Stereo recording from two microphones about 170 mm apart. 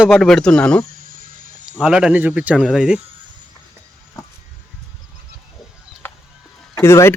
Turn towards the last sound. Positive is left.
turn(degrees=15)  # may be behind; listen again after turning